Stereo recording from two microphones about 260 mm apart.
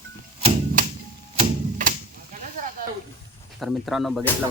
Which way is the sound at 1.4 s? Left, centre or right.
Right.